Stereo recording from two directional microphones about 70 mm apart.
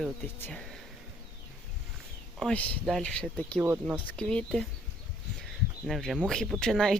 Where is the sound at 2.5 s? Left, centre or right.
Centre.